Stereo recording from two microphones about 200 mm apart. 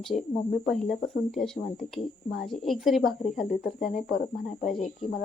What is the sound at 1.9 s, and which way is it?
Speech, centre (ahead or behind).